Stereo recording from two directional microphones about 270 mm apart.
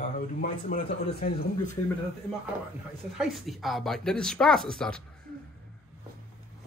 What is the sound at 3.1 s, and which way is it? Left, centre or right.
A man's voice, centre.